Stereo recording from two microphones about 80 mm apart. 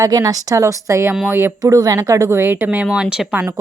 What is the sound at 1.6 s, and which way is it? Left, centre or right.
A woman's voice, right.